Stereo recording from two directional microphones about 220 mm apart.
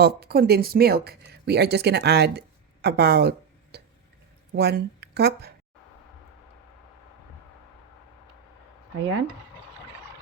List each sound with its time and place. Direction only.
0.0 s speech: 45° right (ahead or behind)
9.0 s dishes: 55° right (ahead or behind)